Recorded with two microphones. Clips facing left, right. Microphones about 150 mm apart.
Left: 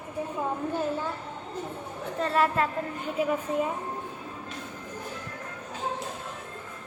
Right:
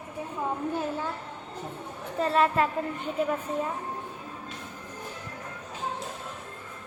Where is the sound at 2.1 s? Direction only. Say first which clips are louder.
Right 1 dB; 5° right (ahead or behind).